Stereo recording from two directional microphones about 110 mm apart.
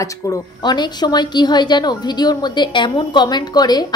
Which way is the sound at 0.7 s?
40° left (ahead or behind).